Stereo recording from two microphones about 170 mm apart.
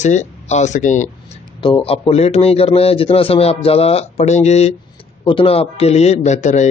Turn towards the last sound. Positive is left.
turn(degrees=45)  # may be behind; listen again after turning